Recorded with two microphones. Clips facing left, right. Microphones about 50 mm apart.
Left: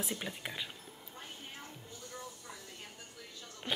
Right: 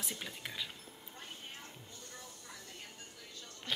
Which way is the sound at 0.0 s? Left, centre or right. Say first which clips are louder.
Left 4 dB; centre.